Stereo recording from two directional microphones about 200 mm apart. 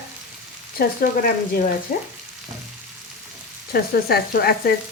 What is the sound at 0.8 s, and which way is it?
Speech, 45° left (ahead or behind).